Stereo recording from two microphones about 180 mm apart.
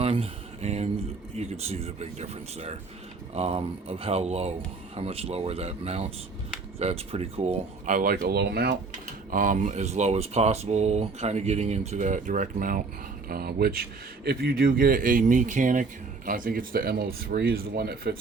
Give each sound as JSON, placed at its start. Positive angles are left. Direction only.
{"t": 0.0, "sound": "speech", "side_deg": -35}
{"t": 8.9, "sound": "speech", "side_deg": -45}